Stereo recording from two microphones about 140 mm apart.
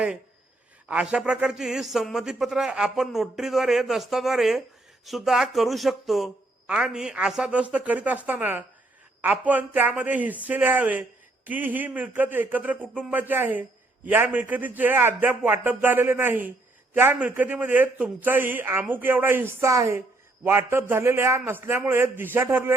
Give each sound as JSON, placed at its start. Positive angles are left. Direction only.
{"t": 0.9, "sound": "a man's voice", "side_deg": -10}